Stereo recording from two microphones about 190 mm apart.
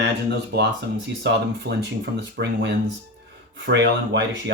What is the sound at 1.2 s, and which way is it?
Speech, 65° right (ahead or behind).